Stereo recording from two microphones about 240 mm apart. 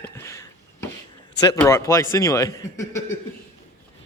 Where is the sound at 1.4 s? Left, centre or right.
Centre.